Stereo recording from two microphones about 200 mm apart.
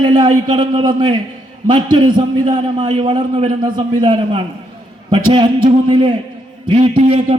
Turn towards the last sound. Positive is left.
turn(degrees=-30)  # may be behind; listen again after turning